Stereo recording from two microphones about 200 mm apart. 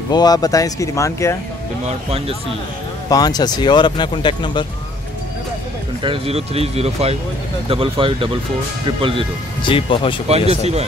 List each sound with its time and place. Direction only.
0.1 s speech: 20° left (ahead or behind)
1.9 s speech: 30° right (ahead or behind)
3.1 s speech: 20° left (ahead or behind)
6.0 s speech: 30° right (ahead or behind)
9.6 s speech: 25° left (ahead or behind)
10.2 s speech: 30° right (ahead or behind)